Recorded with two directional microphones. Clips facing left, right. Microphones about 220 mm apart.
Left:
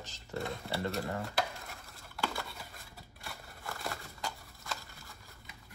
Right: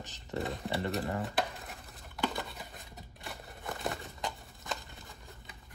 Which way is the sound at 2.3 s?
20° right (ahead or behind).